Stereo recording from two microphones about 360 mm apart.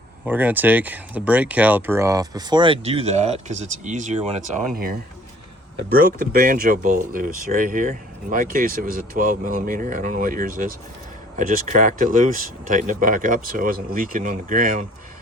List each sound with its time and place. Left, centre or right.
0.3 s speech: centre; by 4.9 s right
6.1 s speech: right